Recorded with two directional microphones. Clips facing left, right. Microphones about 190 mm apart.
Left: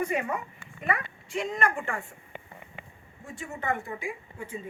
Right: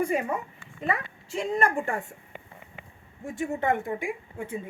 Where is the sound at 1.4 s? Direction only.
35° right (ahead or behind).